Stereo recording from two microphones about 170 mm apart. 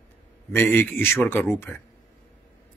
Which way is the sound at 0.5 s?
15° left (ahead or behind).